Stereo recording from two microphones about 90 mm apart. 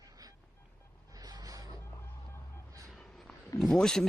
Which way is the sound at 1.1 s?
45° right (ahead or behind).